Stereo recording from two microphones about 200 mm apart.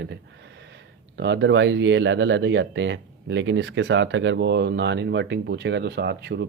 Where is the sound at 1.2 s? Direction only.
65° right (ahead or behind).